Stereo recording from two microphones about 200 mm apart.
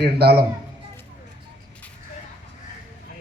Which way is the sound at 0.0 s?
55° right (ahead or behind).